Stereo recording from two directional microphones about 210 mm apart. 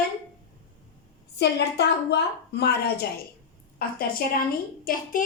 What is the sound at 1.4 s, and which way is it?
A woman's voice, 55° left (ahead or behind).